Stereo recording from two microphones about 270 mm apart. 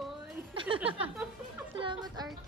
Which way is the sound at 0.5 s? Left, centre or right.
Centre.